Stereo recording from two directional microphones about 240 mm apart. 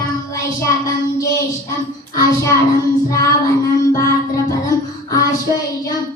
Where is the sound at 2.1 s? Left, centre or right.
Centre.